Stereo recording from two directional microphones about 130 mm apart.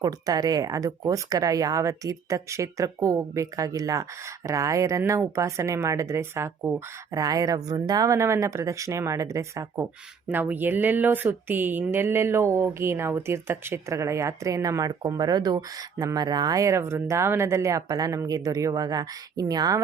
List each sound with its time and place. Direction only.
0.0 s speech: 30° right (ahead or behind)